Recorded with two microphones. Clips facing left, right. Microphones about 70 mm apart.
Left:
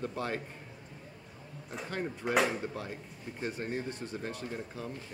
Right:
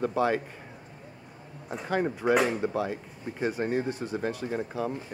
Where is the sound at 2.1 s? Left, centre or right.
Right.